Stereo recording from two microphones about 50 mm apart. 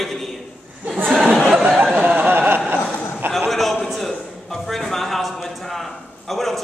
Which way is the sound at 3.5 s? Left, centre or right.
Centre.